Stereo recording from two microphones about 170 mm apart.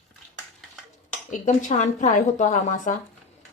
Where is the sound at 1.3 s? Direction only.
50° left (ahead or behind).